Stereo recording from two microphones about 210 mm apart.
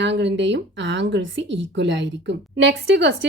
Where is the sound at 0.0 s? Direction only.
55° right (ahead or behind).